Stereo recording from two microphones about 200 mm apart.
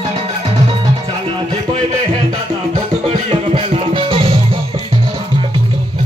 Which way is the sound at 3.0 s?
30° right (ahead or behind).